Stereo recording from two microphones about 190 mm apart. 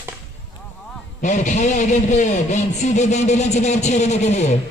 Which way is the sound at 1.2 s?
40° left (ahead or behind).